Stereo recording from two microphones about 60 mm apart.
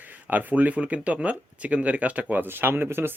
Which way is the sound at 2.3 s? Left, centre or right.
Right.